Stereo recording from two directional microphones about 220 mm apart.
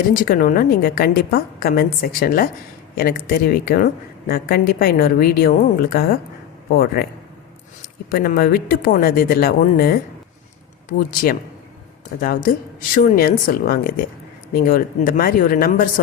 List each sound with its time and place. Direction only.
0.1 s a woman's voice: 40° left (ahead or behind)
8.1 s a woman's voice: 45° left (ahead or behind)